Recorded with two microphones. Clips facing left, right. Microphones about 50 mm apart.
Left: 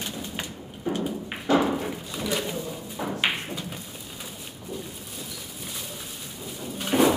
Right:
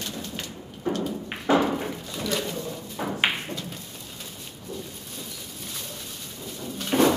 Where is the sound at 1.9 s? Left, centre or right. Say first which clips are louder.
Even; centre.